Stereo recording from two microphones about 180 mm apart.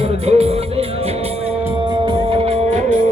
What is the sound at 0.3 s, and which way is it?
Music, 35° right (ahead or behind).